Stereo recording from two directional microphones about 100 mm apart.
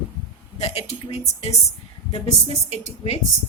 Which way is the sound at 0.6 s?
90° left.